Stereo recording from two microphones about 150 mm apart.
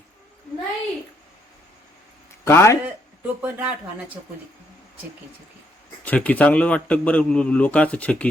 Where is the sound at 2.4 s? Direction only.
20° left (ahead or behind).